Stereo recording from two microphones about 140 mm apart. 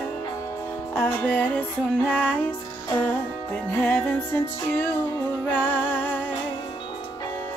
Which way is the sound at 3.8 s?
10° left (ahead or behind).